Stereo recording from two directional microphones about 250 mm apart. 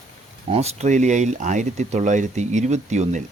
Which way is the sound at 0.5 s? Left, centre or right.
Right.